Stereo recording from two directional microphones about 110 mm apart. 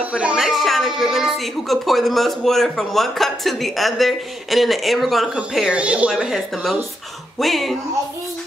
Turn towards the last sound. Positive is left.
turn(degrees=0)  # may be behind; listen again after turning